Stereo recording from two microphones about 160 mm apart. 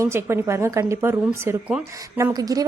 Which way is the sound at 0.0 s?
15° right (ahead or behind).